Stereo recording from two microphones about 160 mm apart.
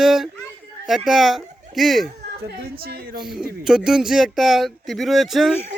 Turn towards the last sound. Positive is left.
turn(degrees=0)  # may be behind; listen again after turning